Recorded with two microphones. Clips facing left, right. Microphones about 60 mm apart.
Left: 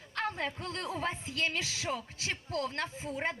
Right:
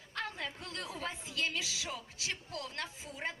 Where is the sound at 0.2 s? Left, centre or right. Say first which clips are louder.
Left 6 dB; left.